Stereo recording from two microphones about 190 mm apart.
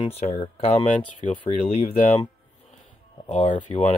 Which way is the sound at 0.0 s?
35° left (ahead or behind).